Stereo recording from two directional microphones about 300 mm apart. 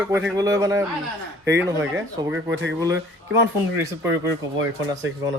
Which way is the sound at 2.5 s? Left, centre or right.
Right.